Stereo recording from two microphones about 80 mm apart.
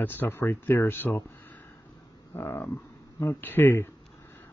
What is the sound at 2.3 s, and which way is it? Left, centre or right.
Speech, left.